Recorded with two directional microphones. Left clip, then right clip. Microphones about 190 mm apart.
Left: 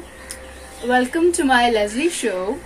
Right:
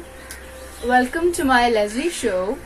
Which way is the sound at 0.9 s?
25° left (ahead or behind).